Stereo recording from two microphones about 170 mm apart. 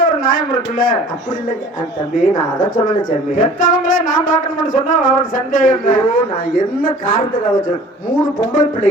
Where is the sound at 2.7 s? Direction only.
50° left (ahead or behind).